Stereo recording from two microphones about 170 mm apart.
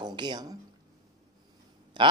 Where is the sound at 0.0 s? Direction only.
25° right (ahead or behind).